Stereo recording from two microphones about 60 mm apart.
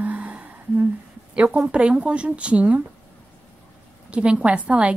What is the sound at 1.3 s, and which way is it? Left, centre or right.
Speech, right.